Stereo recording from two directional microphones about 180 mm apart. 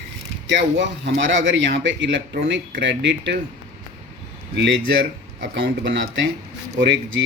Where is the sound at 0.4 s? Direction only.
75° right (ahead or behind).